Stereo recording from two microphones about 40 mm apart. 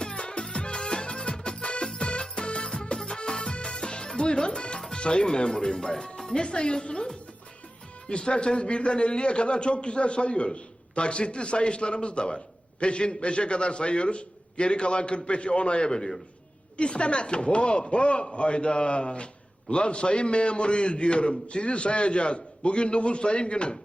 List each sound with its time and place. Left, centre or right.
0.0 s music: left
8.0 s a man's voice: left